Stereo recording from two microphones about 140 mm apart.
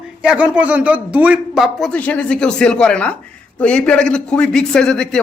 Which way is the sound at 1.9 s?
10° left (ahead or behind).